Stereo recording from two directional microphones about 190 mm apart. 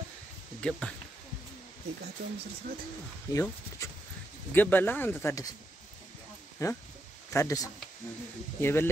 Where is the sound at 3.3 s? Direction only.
15° left (ahead or behind).